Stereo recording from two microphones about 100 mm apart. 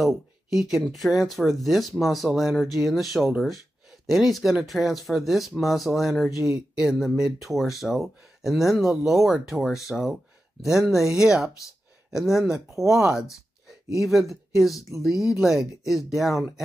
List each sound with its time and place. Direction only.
0.0 s speech: 5° right (ahead or behind)